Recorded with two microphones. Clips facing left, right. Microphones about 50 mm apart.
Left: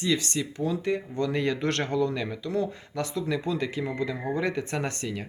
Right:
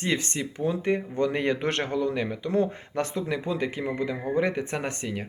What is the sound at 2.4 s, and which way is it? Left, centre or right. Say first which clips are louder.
Speech: right 5 dB; right.